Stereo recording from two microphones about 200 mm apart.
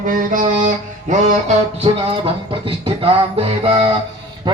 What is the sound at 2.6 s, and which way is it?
Music, 25° right (ahead or behind).